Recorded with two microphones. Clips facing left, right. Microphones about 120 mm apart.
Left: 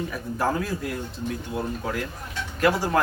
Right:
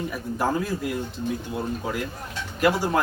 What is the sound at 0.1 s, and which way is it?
Speech, 5° right (ahead or behind).